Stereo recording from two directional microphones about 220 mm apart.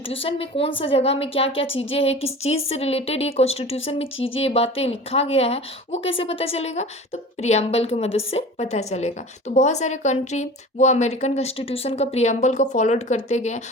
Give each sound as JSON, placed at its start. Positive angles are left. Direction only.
{"t": 0.1, "sound": "a woman's voice", "side_deg": 25}